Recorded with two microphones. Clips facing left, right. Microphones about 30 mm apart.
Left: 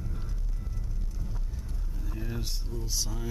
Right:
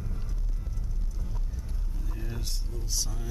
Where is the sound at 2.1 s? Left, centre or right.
Centre.